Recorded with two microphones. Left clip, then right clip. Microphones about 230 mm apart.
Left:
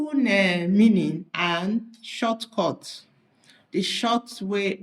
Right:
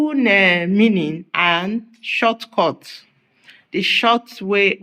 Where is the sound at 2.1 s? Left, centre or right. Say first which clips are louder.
Right 10 dB; right.